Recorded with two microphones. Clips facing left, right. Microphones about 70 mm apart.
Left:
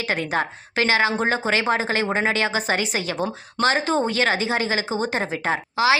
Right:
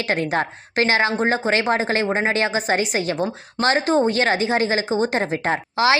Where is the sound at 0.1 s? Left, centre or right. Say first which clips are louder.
Right 2 dB; right.